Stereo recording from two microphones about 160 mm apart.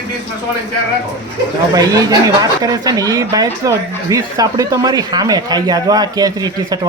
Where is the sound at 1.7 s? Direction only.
25° right (ahead or behind).